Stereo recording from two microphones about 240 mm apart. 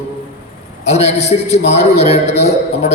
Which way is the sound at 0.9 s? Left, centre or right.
Left.